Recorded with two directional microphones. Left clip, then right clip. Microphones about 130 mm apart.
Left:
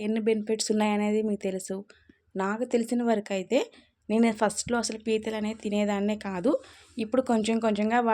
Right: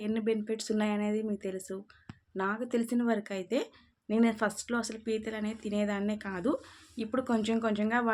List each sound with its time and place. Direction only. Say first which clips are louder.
0.0 s speech: left 5 dB; 40° left (ahead or behind)